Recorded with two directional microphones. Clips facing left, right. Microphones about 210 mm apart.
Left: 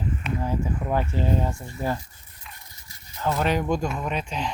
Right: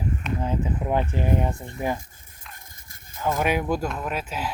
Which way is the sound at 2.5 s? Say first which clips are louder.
Even; 50° right (ahead or behind).